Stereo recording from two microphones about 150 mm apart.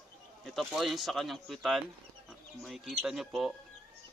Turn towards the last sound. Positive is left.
turn(degrees=0)  # may be behind; listen again after turning